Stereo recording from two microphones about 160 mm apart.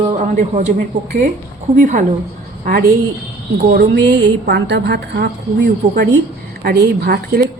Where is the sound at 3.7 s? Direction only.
90° right.